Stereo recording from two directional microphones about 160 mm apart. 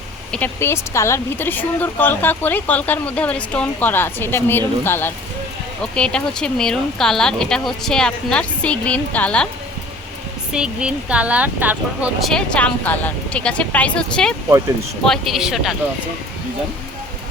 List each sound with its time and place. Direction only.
0.3 s speech: 10° left (ahead or behind)
10.5 s speech: 5° right (ahead or behind)
12.2 s speech: 5° left (ahead or behind)